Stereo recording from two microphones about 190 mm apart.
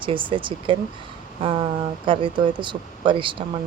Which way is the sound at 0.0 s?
25° right (ahead or behind).